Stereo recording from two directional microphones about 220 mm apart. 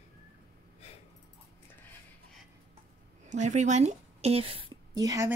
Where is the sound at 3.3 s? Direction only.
35° right (ahead or behind).